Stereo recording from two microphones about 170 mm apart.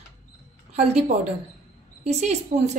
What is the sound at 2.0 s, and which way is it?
Speech, 40° right (ahead or behind).